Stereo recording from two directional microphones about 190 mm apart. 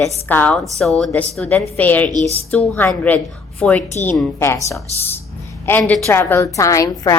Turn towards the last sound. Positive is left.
turn(degrees=20)  # may be behind; listen again after turning